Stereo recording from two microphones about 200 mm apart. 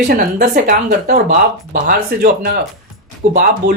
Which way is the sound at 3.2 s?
35° right (ahead or behind).